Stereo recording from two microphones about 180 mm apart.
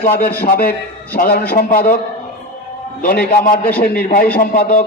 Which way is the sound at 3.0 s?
55° left (ahead or behind).